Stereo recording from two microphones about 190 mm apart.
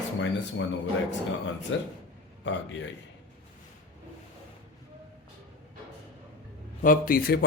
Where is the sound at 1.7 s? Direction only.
80° left.